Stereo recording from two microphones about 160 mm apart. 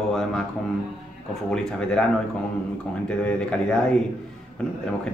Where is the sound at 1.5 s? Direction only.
5° left (ahead or behind).